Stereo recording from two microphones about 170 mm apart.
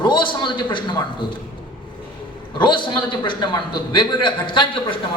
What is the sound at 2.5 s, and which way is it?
A man's voice, 30° left (ahead or behind).